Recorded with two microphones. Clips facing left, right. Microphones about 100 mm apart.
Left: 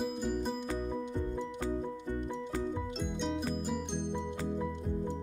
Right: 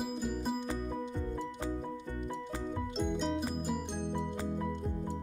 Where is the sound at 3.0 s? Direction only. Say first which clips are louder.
Right 4 dB; centre (ahead or behind).